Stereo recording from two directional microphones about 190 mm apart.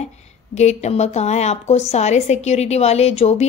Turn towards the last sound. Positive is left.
turn(degrees=35)  # may be behind; listen again after turning